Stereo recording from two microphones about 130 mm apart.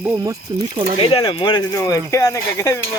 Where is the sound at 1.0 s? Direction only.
45° left (ahead or behind).